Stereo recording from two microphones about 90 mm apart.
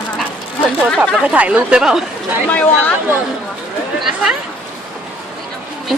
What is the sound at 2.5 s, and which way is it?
Speech, 20° left (ahead or behind).